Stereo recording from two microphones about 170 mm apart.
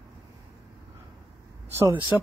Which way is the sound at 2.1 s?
10° right (ahead or behind).